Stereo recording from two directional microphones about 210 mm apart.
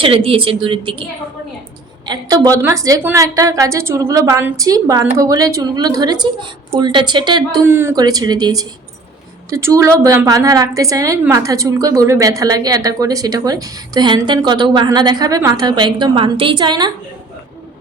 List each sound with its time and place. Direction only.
0.0 s a woman's voice: 25° right (ahead or behind)
2.0 s a woman's voice: 15° right (ahead or behind)